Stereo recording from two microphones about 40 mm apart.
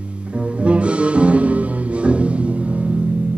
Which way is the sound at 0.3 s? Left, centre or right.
Right.